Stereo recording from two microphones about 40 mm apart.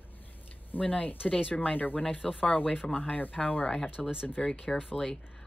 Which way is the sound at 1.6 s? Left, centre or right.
Left.